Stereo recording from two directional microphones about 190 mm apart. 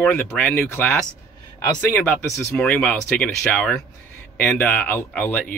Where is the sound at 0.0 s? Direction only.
5° left (ahead or behind).